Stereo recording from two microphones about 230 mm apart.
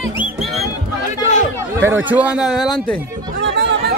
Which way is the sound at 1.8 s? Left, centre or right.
Centre.